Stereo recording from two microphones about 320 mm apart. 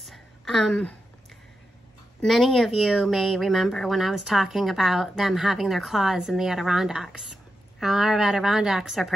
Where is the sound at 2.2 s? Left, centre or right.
Centre.